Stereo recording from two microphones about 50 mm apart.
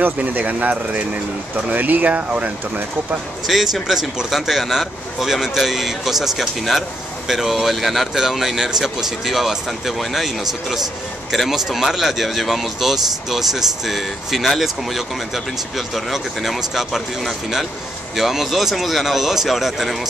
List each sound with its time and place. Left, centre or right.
0.0 s speech: right
3.4 s speech: centre